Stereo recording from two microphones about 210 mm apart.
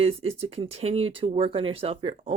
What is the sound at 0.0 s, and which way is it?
Speech, 25° right (ahead or behind).